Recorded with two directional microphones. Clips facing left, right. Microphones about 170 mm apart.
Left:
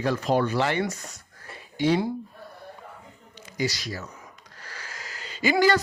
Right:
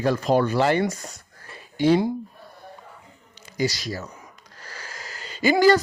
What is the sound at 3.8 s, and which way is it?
Speech, 30° right (ahead or behind).